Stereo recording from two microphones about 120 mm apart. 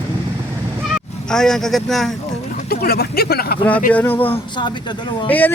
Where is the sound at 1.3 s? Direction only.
5° left (ahead or behind).